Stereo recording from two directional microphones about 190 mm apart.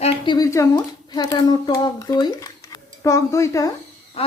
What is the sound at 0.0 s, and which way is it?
Speech, 20° left (ahead or behind).